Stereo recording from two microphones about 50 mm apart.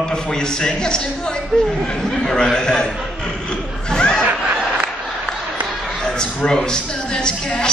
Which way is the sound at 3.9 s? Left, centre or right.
Centre.